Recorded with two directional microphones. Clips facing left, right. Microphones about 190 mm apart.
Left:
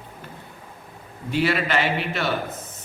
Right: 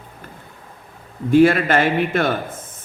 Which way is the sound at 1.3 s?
50° right (ahead or behind).